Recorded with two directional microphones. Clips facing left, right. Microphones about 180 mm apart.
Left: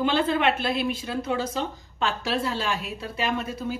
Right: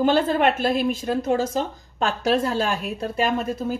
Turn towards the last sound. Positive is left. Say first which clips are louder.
# right 5 dB
turn(degrees=-45)  # may be behind; listen again after turning